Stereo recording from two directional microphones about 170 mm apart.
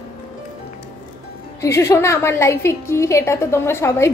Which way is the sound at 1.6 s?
15° left (ahead or behind).